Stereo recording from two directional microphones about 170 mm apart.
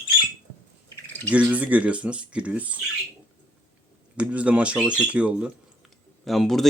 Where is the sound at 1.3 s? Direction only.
10° right (ahead or behind).